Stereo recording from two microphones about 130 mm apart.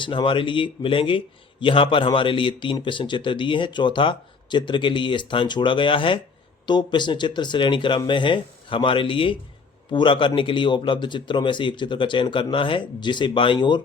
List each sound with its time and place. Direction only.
0.0 s a man's voice: 40° left (ahead or behind)